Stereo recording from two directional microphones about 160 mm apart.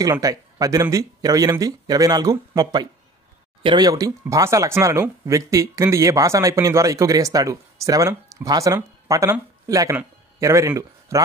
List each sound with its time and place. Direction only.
0.0 s speech: 20° right (ahead or behind)